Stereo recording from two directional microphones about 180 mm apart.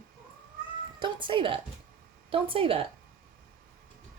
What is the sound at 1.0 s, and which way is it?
Speech, 25° right (ahead or behind).